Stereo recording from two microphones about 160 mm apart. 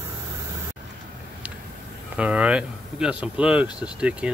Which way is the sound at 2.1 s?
5° right (ahead or behind).